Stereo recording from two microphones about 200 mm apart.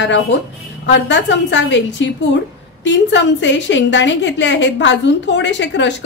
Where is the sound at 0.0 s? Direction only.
60° left (ahead or behind).